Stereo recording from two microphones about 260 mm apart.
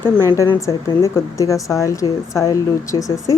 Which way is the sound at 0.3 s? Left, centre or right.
Centre.